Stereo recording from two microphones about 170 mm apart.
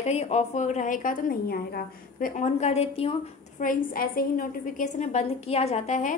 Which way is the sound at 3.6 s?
55° left (ahead or behind).